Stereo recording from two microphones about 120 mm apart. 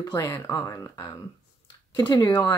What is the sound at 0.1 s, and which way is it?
Speech, 25° left (ahead or behind).